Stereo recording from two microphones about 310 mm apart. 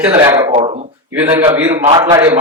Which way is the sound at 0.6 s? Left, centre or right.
Centre.